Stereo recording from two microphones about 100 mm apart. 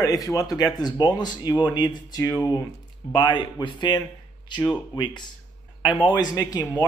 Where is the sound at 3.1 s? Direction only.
50° left (ahead or behind).